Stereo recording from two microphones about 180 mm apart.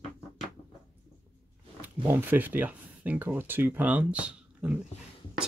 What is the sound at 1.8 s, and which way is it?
Speech, 10° right (ahead or behind).